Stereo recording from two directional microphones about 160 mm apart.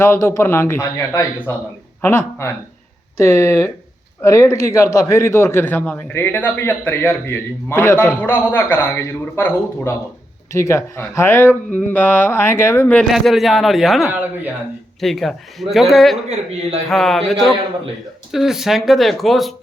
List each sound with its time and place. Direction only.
0.0 s a man's voice: 15° left (ahead or behind)
13.1 s speech: centre (ahead or behind)
14.1 s speech: 10° right (ahead or behind)
15.0 s speech: centre (ahead or behind)